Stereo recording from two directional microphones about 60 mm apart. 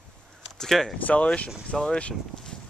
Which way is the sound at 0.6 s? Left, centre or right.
Centre.